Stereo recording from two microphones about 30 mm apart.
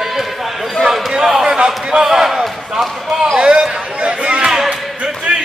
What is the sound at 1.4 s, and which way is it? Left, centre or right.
Basketball bounce, right.